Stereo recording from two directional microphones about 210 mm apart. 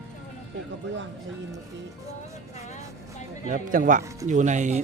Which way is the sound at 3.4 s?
40° right (ahead or behind).